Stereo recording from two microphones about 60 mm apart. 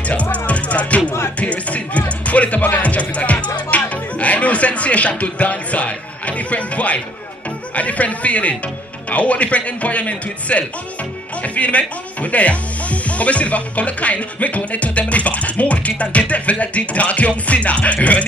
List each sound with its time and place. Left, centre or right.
0.0 s music: left
7.7 s speech: left